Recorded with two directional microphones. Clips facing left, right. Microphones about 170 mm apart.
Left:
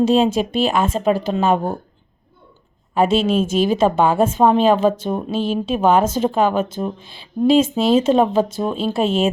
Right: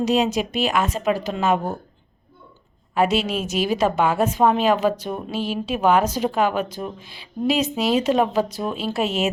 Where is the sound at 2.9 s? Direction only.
25° left (ahead or behind).